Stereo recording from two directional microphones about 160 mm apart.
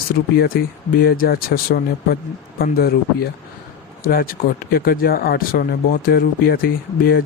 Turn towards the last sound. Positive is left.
turn(degrees=65)  # may be behind; listen again after turning